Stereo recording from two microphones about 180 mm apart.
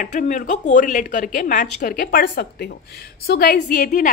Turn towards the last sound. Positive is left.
turn(degrees=50)  # may be behind; listen again after turning